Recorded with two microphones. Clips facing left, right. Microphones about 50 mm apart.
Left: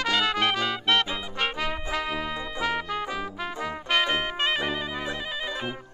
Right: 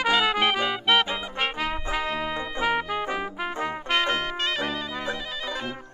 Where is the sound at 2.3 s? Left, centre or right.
Centre.